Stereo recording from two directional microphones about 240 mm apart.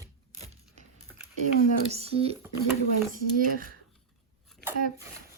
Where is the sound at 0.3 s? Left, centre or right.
Right.